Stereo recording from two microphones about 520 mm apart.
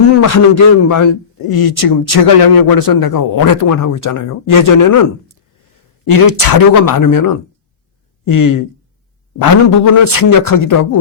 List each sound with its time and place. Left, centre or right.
0.2 s a man's voice: left
6.1 s a man's voice: left